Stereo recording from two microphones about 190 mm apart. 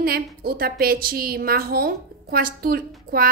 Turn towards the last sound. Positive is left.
turn(degrees=-50)  # may be behind; listen again after turning